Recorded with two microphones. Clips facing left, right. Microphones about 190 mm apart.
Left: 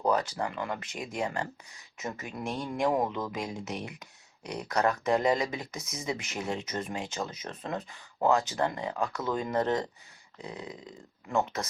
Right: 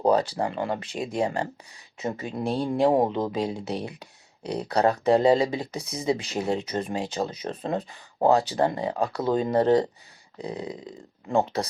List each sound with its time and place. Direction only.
0.0 s speech: 30° right (ahead or behind)